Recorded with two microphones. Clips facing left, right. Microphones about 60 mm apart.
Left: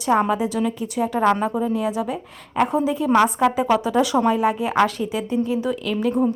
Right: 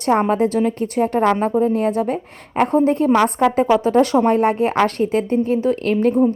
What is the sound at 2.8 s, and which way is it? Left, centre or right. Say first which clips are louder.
Speech: right 2 dB; right.